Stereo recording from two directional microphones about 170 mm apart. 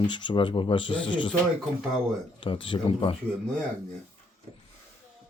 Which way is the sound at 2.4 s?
30° left (ahead or behind).